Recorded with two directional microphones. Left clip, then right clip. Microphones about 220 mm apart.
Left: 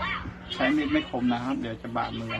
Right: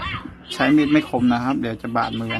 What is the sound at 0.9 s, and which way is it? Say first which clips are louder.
Speech: right 8 dB; 50° right (ahead or behind).